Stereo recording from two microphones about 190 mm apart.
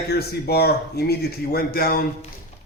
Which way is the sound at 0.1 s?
55° left (ahead or behind).